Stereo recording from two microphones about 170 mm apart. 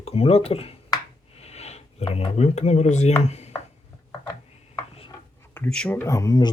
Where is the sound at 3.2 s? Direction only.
40° left (ahead or behind).